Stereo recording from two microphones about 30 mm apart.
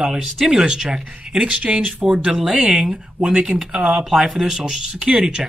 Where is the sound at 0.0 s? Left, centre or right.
Centre.